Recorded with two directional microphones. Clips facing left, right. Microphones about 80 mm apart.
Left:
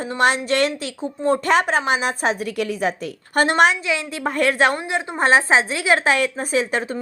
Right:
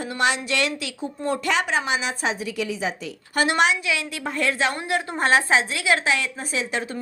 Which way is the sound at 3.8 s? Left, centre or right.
Left.